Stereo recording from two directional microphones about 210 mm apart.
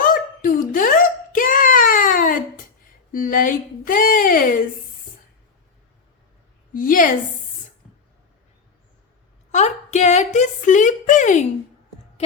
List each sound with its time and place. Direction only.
0.0 s a sound: 40° left (ahead or behind)
3.1 s speech: 40° left (ahead or behind)
6.7 s speech: 40° left (ahead or behind)
9.5 s speech: 35° left (ahead or behind)